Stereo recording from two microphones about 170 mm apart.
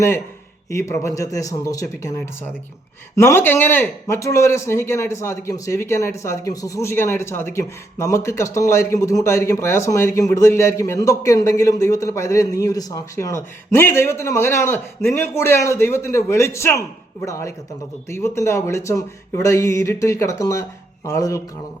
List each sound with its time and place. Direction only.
0.7 s a man's voice: 15° left (ahead or behind)